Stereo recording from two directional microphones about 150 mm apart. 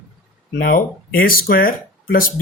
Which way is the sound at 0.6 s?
70° left (ahead or behind).